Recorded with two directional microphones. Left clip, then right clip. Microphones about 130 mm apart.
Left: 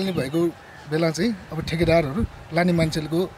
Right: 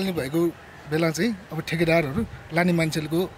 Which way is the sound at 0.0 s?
Centre (ahead or behind).